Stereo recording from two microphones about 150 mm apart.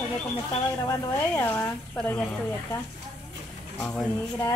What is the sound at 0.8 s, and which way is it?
A woman's voice, 15° left (ahead or behind).